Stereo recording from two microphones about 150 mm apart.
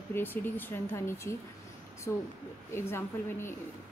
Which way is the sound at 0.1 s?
15° left (ahead or behind).